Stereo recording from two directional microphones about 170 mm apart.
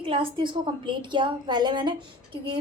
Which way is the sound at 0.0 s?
30° right (ahead or behind).